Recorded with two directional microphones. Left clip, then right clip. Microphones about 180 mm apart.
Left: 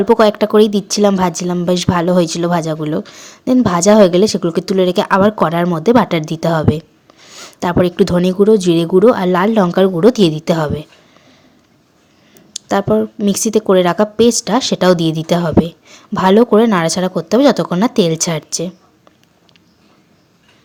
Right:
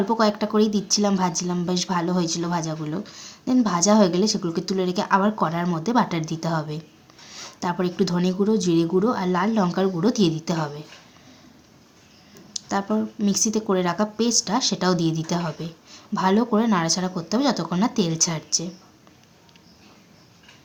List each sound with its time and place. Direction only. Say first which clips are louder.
0.0 s speech: left 11 dB; 50° left (ahead or behind)
12.6 s speech: left 11 dB; 50° left (ahead or behind)